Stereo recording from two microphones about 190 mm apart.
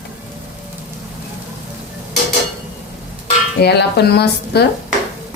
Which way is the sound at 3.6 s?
60° left (ahead or behind).